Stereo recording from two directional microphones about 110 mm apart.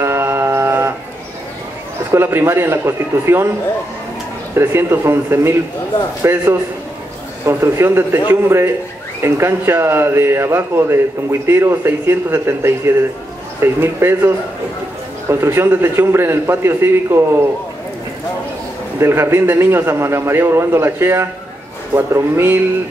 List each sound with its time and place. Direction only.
0.0 s mantra: 20° right (ahead or behind)
2.0 s a man's voice: 20° right (ahead or behind)
4.6 s a man's voice: 20° right (ahead or behind)
18.9 s a man's voice: 25° right (ahead or behind)